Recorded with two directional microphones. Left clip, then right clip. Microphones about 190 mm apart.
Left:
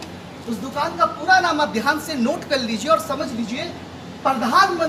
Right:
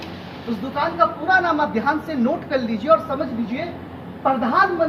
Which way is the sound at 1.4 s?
25° left (ahead or behind).